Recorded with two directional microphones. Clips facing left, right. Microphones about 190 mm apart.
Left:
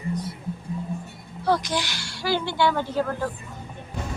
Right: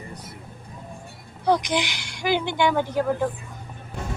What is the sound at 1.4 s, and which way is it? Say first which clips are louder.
A woman's voice: right 2 dB; 20° right (ahead or behind).